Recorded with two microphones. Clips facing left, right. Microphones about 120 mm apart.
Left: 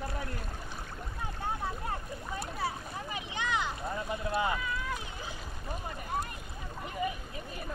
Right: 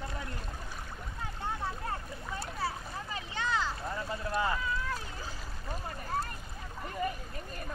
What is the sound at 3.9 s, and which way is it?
Boat, 20° left (ahead or behind).